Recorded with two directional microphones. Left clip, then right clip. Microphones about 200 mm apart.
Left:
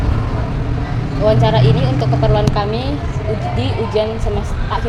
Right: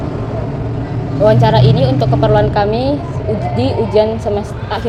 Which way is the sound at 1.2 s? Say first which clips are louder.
Right 4 dB; 20° right (ahead or behind).